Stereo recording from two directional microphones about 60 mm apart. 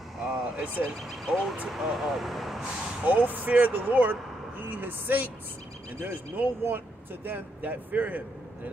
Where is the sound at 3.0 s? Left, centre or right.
Right.